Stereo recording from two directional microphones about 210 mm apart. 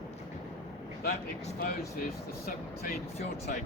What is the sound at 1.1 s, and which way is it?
Speech, 40° left (ahead or behind).